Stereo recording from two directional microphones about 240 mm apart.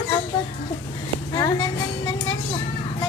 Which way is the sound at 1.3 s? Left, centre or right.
Centre.